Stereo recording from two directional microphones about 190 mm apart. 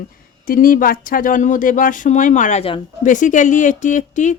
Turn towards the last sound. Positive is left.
turn(degrees=40)  # may be behind; listen again after turning